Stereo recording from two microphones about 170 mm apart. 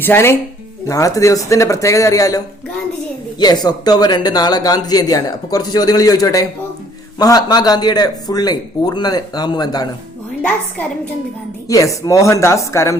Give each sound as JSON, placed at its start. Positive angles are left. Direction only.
{"t": 0.0, "sound": "speech", "side_deg": 15}
{"t": 3.4, "sound": "speech", "side_deg": 25}
{"t": 11.7, "sound": "speech", "side_deg": 20}